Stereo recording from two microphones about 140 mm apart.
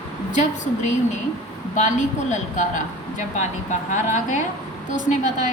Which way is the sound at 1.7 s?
60° left (ahead or behind).